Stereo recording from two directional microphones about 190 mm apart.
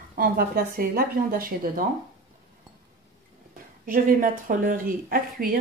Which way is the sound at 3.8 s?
45° right (ahead or behind).